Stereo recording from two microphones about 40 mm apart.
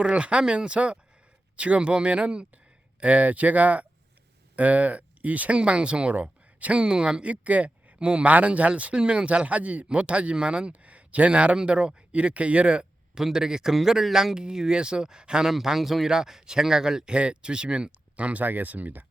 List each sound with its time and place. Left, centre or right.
0.0 s speech: right
5.5 s speech: right
6.8 s speech: right
7.4 s a sound: right
7.9 s speech: right
8.2 s speech: right
13.2 s speech: centre
15.8 s speech: centre
16.0 s speech: centre
17.1 s speech: right
18.2 s speech: right
18.4 s speech: right